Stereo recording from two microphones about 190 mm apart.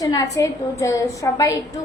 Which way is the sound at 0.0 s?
20° left (ahead or behind).